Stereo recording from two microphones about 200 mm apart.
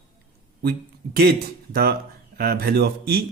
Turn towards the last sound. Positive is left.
turn(degrees=-50)  # may be behind; listen again after turning